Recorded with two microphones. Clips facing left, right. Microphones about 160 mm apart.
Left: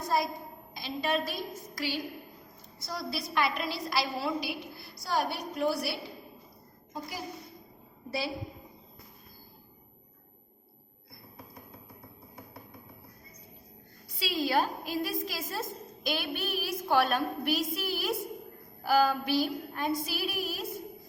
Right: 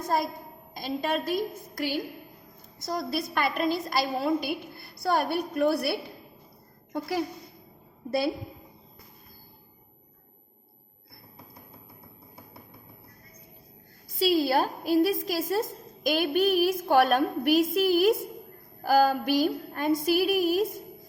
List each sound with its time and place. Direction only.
0.0 s a woman's voice: 50° right (ahead or behind)
2.8 s a woman's voice: 50° right (ahead or behind)
6.9 s a woman's voice: 70° right (ahead or behind)
14.2 s a woman's voice: 40° right (ahead or behind)